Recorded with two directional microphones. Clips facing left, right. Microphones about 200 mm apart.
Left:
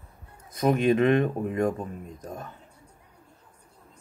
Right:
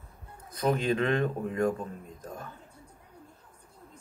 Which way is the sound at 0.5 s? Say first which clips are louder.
Left 5 dB; 20° left (ahead or behind).